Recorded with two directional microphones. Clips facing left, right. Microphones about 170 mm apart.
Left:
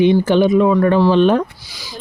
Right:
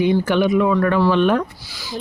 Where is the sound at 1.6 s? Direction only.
15° left (ahead or behind).